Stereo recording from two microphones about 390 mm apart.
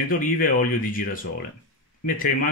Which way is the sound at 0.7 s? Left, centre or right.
Left.